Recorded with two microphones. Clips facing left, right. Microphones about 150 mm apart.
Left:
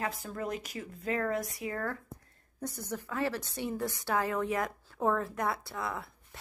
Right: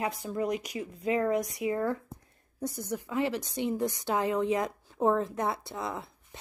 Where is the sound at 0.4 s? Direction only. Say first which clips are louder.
Right 6 dB; 15° right (ahead or behind).